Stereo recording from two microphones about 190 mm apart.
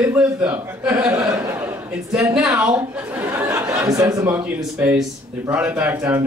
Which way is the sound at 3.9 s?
15° right (ahead or behind).